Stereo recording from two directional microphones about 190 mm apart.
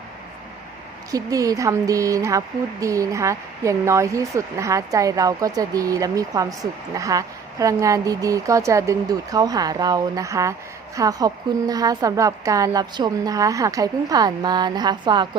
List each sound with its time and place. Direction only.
1.1 s a woman's voice: 20° right (ahead or behind)